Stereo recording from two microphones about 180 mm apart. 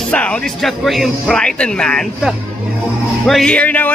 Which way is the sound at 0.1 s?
5° left (ahead or behind).